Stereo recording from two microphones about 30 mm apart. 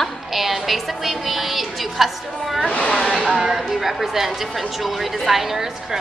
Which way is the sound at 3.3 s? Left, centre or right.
Centre.